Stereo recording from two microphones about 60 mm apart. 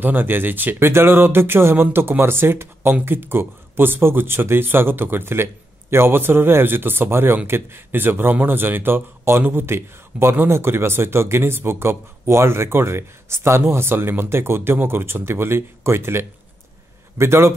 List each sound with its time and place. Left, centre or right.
0.0 s a man's voice: right